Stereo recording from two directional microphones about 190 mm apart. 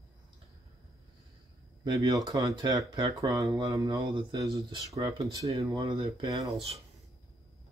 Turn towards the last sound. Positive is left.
turn(degrees=-20)  # may be behind; listen again after turning